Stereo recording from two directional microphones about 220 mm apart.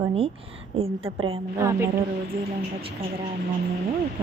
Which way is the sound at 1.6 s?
10° right (ahead or behind).